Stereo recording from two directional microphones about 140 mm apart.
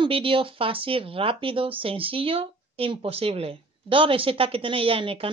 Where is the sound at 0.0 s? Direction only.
40° right (ahead or behind).